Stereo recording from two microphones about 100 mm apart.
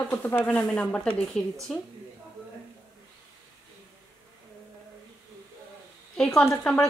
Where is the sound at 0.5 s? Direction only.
15° left (ahead or behind).